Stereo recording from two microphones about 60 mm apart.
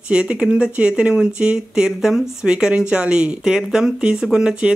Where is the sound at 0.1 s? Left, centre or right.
Centre.